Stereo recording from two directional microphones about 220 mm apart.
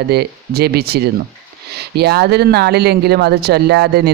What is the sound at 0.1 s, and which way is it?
A man's voice, 45° right (ahead or behind).